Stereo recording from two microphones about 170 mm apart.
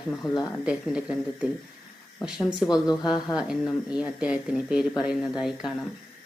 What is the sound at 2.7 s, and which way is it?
Speech, 25° left (ahead or behind).